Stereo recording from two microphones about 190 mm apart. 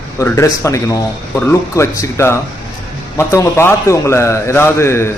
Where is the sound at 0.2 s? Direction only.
15° left (ahead or behind).